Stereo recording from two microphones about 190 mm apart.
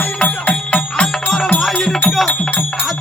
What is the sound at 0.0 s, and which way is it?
Music, 5° left (ahead or behind).